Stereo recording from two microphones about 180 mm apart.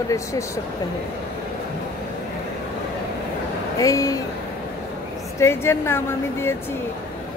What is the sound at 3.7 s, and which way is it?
Speech, 20° left (ahead or behind).